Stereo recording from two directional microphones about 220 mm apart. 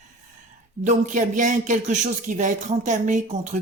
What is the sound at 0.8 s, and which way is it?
Speech, 35° right (ahead or behind).